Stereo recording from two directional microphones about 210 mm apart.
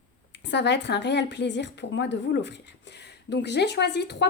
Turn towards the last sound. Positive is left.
turn(degrees=55)  # may be behind; listen again after turning